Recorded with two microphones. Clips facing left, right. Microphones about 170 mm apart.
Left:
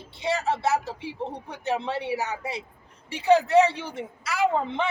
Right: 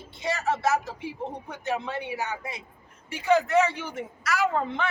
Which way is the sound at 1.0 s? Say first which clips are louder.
Left 1 dB; 30° left (ahead or behind).